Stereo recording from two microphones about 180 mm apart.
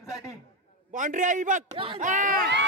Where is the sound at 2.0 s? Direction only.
45° right (ahead or behind).